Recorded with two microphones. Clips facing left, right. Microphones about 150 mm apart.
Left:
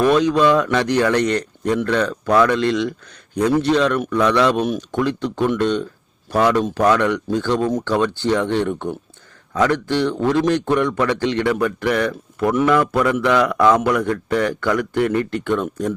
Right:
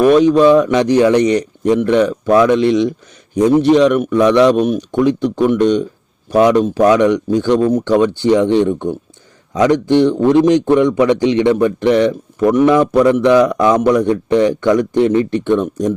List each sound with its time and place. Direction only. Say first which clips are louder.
0.0 s a man's voice: right 6 dB; 15° right (ahead or behind)